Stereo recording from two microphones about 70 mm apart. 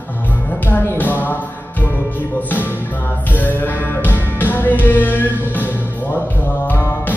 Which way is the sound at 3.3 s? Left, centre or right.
Left.